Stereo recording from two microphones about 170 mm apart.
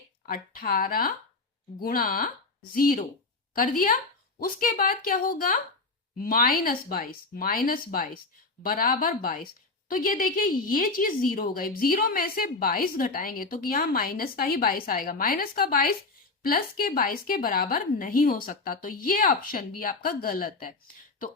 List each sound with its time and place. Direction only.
0.3 s a woman's voice: 60° left (ahead or behind)